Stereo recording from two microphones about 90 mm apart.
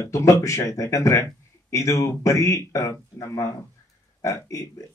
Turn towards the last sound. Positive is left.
turn(degrees=35)  # may be behind; listen again after turning